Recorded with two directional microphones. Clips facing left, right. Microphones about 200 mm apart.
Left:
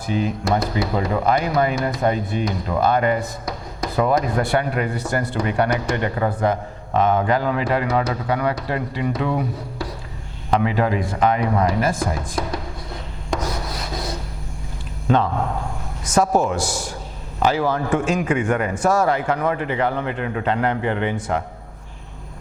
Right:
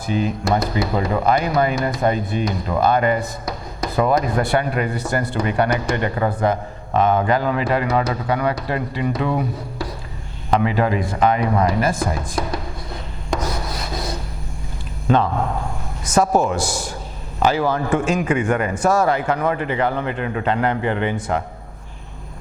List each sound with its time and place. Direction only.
0.0 s speech: 15° right (ahead or behind)
13.7 s rub: 10° right (ahead or behind)
15.3 s a man's voice: 25° right (ahead or behind)
16.4 s speech: 10° right (ahead or behind)